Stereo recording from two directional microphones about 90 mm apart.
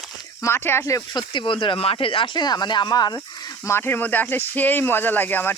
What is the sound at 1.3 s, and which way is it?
Speech, 70° left (ahead or behind).